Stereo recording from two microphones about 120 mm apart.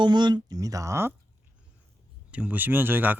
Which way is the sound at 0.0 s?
40° right (ahead or behind).